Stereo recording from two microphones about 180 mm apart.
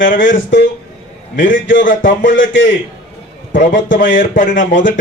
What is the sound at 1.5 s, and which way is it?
Speech, 90° left.